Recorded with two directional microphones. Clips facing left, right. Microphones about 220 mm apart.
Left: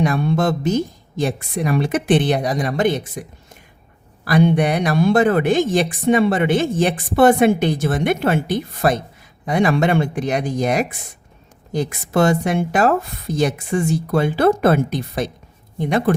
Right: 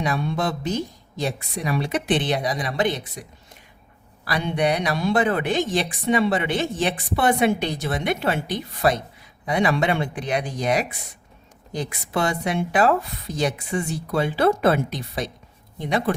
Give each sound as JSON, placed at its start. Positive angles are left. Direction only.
{"t": 0.0, "sound": "a woman's voice", "side_deg": 50}